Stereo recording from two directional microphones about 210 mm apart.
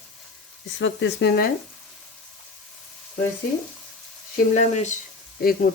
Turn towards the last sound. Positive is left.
turn(degrees=45)  # may be behind; listen again after turning